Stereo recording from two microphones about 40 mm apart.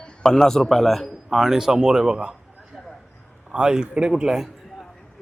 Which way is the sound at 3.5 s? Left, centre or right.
Centre.